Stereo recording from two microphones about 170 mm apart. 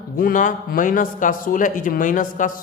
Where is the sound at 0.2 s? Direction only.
55° left (ahead or behind).